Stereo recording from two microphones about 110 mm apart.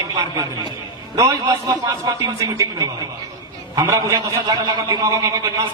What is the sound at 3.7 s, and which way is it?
A man's voice, 35° right (ahead or behind).